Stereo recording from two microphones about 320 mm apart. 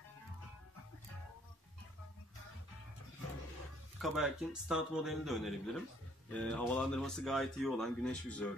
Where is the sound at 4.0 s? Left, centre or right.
Centre.